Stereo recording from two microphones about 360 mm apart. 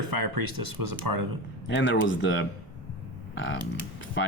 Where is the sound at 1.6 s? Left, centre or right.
Left.